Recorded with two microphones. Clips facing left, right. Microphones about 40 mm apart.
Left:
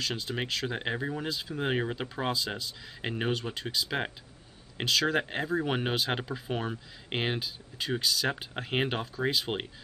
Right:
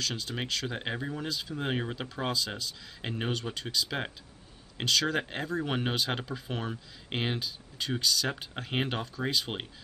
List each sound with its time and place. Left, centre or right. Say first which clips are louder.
0.0 s speech: left 2 dB; centre